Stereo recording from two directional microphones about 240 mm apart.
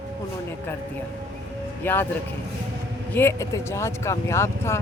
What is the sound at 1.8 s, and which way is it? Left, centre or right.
Speech, centre.